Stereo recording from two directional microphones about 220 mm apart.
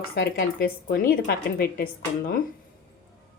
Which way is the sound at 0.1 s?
45° left (ahead or behind).